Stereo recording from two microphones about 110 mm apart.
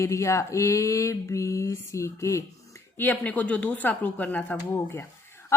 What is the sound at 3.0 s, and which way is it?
A woman's voice, 15° left (ahead or behind).